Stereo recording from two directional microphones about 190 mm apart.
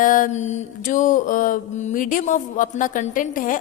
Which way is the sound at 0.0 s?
45° left (ahead or behind).